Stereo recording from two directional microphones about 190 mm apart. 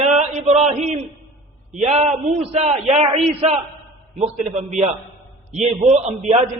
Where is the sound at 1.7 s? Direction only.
35° right (ahead or behind).